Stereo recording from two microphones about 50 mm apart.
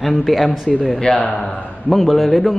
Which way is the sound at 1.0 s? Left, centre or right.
Centre.